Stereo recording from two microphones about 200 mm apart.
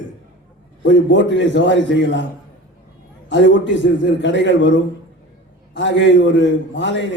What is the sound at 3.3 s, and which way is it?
A man's voice, 65° left (ahead or behind).